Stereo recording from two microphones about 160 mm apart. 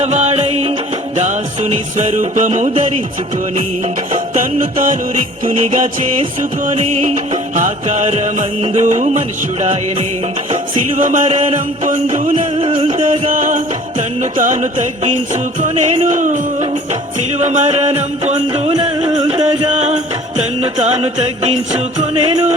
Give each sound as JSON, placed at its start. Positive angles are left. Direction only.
{"t": 0.0, "sound": "music", "side_deg": -45}
{"t": 4.1, "sound": "music", "side_deg": -50}
{"t": 5.5, "sound": "music", "side_deg": -45}
{"t": 12.5, "sound": "music", "side_deg": -35}
{"t": 13.0, "sound": "music", "side_deg": -50}
{"t": 18.7, "sound": "music", "side_deg": -30}
{"t": 19.3, "sound": "music", "side_deg": -45}